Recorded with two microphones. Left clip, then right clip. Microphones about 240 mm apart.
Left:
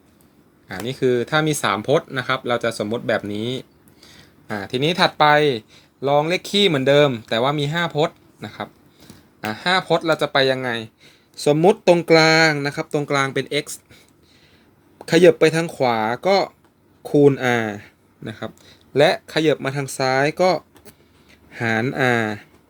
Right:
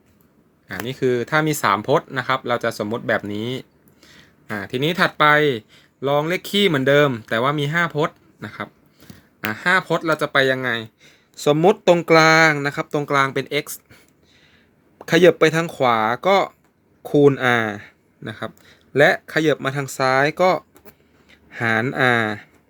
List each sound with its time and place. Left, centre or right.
0.9 s speech: centre
4.0 s a sound: centre
5.5 s speech: centre
14.9 s speech: centre